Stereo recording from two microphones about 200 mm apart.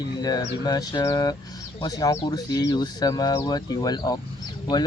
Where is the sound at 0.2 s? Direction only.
20° left (ahead or behind).